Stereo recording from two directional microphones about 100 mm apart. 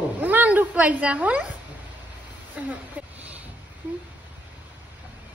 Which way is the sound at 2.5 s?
15° right (ahead or behind).